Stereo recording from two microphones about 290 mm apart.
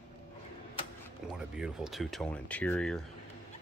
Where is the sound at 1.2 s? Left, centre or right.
Centre.